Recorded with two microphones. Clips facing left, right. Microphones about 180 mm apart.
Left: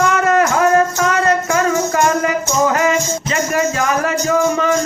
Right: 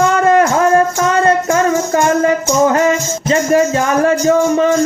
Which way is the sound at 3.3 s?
30° right (ahead or behind).